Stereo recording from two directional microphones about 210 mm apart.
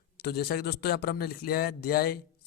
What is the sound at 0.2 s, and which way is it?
A man's voice, 50° left (ahead or behind).